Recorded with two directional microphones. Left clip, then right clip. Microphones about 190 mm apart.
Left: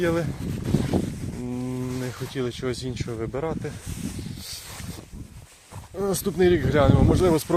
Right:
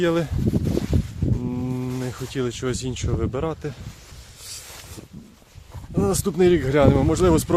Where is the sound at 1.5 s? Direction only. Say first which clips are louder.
Right 2 dB; 15° right (ahead or behind).